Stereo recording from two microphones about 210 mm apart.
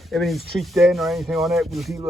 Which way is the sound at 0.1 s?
Centre (ahead or behind).